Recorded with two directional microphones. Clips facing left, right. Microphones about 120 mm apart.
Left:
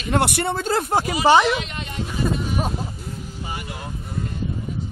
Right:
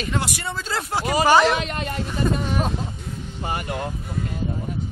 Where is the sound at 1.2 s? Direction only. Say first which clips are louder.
Left 1 dB; 20° left (ahead or behind).